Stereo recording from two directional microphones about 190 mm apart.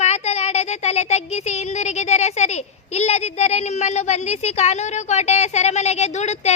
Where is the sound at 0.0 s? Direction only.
35° left (ahead or behind).